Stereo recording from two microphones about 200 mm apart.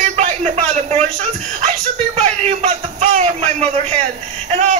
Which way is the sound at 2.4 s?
35° right (ahead or behind).